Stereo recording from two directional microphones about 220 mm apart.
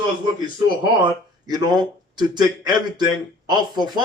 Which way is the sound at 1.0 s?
15° right (ahead or behind).